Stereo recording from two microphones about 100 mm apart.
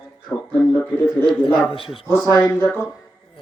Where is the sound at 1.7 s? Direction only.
65° left (ahead or behind).